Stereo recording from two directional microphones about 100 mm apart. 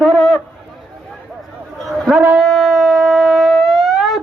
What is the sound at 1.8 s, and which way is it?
Run, centre (ahead or behind).